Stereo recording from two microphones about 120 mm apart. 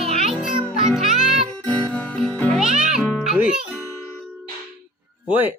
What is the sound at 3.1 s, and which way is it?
Music, 5° right (ahead or behind).